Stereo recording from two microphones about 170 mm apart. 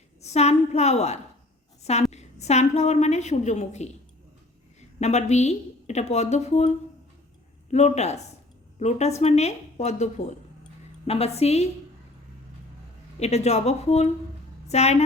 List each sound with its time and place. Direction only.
0.2 s a woman's voice: 40° left (ahead or behind)
4.9 s a woman's voice: 40° left (ahead or behind)
13.1 s a woman's voice: 40° left (ahead or behind)